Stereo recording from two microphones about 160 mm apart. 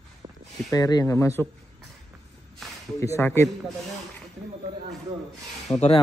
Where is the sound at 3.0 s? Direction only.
15° left (ahead or behind).